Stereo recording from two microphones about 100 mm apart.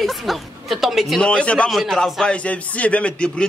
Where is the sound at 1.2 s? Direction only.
10° left (ahead or behind).